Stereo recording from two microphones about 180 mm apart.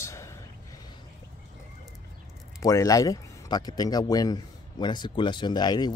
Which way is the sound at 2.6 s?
20° left (ahead or behind).